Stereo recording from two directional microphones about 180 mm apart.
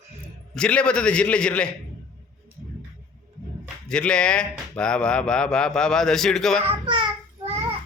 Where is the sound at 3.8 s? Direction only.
5° left (ahead or behind).